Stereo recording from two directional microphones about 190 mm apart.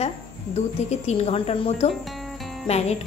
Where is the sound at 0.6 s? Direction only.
35° left (ahead or behind).